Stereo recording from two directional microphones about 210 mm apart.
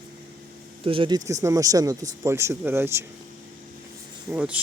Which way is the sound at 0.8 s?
25° right (ahead or behind).